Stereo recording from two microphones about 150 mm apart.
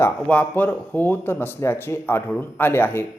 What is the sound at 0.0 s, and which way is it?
Speech, 10° left (ahead or behind).